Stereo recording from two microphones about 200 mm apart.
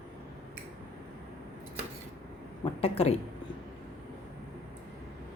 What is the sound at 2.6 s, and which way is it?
Speech, 30° left (ahead or behind).